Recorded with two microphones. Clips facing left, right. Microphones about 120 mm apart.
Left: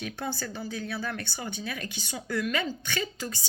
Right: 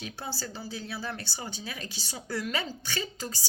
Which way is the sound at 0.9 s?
30° right (ahead or behind).